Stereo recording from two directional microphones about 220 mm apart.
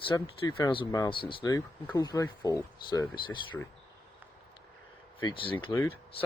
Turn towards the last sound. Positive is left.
turn(degrees=10)  # may be behind; listen again after turning